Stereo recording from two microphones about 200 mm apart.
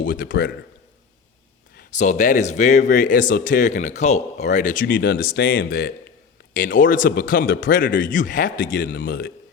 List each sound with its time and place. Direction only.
0.0 s a man's voice: 45° left (ahead or behind)
1.9 s speech: 35° left (ahead or behind)